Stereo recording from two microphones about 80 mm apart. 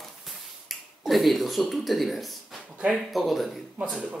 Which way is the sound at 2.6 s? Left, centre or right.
Centre.